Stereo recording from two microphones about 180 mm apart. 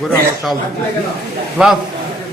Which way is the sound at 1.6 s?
5° right (ahead or behind).